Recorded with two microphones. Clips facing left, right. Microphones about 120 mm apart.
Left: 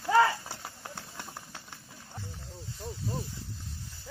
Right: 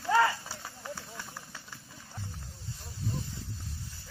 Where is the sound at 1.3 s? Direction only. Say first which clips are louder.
Left 1 dB; 20° left (ahead or behind).